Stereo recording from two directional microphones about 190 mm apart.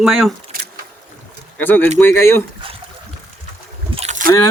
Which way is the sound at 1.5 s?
10° left (ahead or behind).